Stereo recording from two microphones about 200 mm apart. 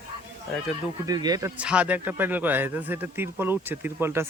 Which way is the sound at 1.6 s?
5° right (ahead or behind).